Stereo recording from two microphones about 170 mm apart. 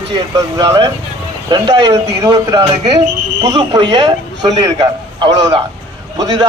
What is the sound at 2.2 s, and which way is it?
A man's voice, 20° right (ahead or behind).